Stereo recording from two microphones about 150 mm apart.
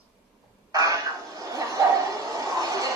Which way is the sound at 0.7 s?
20° right (ahead or behind).